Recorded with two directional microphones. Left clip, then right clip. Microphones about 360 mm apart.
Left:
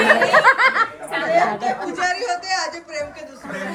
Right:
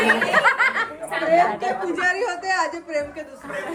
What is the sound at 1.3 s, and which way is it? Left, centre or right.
A man's voice, right.